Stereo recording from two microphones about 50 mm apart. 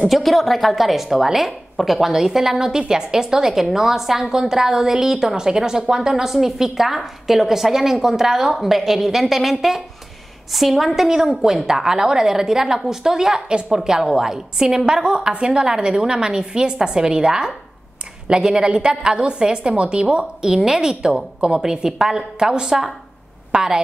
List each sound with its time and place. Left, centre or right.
0.1 s a woman's voice: centre